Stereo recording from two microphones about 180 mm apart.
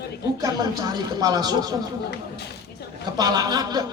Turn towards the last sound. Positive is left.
turn(degrees=-20)  # may be behind; listen again after turning